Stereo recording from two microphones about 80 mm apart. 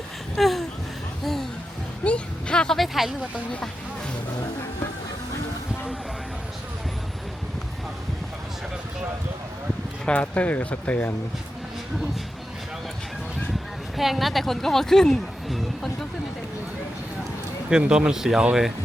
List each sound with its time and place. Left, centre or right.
0.3 s a sound: centre
1.2 s music: centre
2.0 s a sound: centre
10.1 s speech: centre
13.5 s speech: centre
17.7 s speech: centre